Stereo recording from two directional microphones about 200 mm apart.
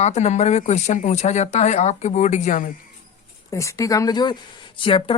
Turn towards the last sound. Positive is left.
turn(degrees=25)  # may be behind; listen again after turning